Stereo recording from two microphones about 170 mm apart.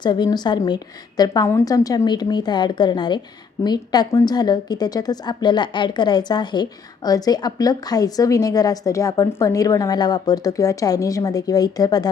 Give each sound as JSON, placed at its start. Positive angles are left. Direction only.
{"t": 0.0, "sound": "a woman's voice", "side_deg": 25}